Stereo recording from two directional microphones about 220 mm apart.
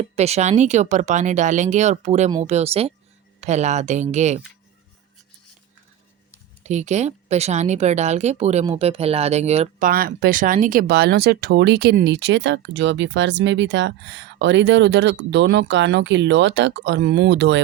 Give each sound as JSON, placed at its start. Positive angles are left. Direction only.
{"t": 0.0, "sound": "speech", "side_deg": -30}
{"t": 6.6, "sound": "speech", "side_deg": -30}
{"t": 9.9, "sound": "speech", "side_deg": -40}